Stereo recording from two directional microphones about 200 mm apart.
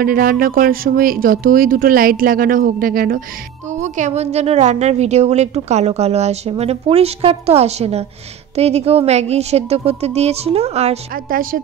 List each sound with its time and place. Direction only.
0.0 s speech: 45° right (ahead or behind)
3.8 s a woman's voice: 35° right (ahead or behind)